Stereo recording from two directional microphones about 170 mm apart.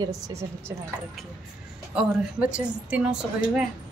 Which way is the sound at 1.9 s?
5° right (ahead or behind).